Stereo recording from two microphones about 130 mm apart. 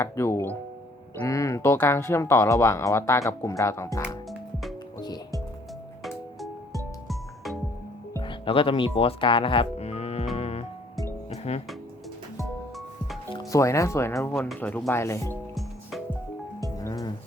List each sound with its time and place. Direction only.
0.0 s speech: 20° left (ahead or behind)
6.0 s music: centre (ahead or behind)
8.2 s speech: 40° left (ahead or behind)
10.3 s music: 50° left (ahead or behind)
13.5 s speech: 25° left (ahead or behind)
16.8 s music: 30° left (ahead or behind)